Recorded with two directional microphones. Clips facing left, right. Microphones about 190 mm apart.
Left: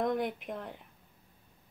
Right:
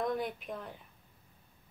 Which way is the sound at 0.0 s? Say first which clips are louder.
Left 3 dB; 20° left (ahead or behind).